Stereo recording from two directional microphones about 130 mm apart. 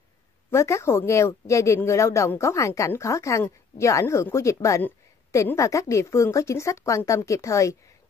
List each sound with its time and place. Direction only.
0.5 s speech: 20° left (ahead or behind)